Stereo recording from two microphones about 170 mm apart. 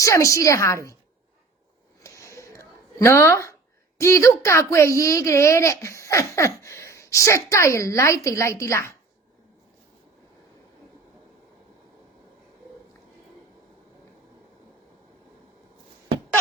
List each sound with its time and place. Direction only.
0.0 s a child's voice: 20° left (ahead or behind)
2.0 s a sound: 15° left (ahead or behind)
3.0 s a child's voice: 15° left (ahead or behind)